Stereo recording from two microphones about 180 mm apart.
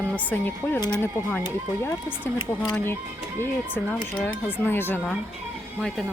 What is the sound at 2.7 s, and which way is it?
A woman's voice, 10° left (ahead or behind).